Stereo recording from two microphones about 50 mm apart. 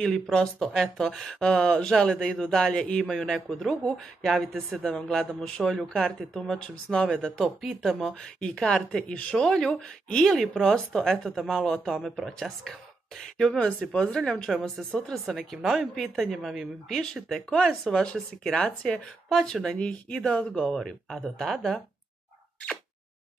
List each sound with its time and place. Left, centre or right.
0.0 s a woman's voice: centre
9.0 s a woman's voice: left; by 12.7 s centre
13.2 s speech: centre
14.8 s a woman's voice: centre; by 19.3 s left
19.3 s speech: centre
19.7 s speech: left